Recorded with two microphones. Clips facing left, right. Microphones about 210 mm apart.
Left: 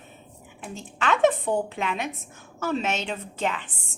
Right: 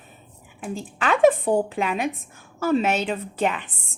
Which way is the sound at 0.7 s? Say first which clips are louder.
Right 2 dB; 10° right (ahead or behind).